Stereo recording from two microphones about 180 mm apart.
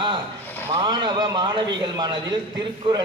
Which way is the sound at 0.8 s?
25° right (ahead or behind).